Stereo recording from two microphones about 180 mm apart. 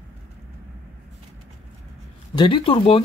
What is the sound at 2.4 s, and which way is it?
Speech, 30° left (ahead or behind).